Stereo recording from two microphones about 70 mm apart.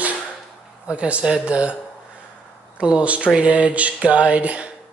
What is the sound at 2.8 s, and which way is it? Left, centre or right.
Speech, centre.